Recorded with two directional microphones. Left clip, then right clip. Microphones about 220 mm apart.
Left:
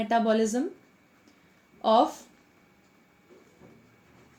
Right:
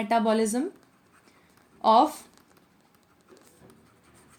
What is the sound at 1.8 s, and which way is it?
Speech, 35° right (ahead or behind).